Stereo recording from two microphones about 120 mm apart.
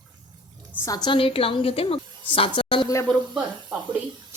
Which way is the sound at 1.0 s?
45° left (ahead or behind).